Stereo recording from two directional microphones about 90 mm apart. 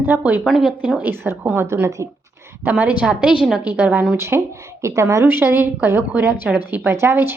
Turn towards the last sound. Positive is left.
turn(degrees=-25)  # may be behind; listen again after turning